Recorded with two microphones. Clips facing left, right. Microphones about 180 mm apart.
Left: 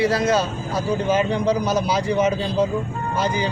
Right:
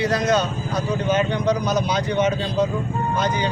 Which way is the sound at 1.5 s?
5° left (ahead or behind).